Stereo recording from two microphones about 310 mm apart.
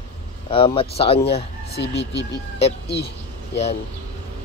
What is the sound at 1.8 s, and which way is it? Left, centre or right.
Speech, left.